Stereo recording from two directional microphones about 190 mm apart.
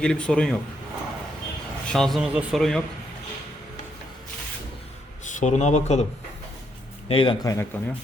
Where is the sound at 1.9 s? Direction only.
Centre (ahead or behind).